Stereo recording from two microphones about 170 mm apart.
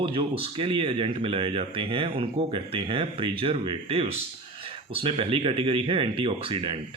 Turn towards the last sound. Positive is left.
turn(degrees=-30)  # may be behind; listen again after turning